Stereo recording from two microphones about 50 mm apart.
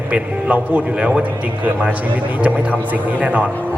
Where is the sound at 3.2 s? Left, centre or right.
Right.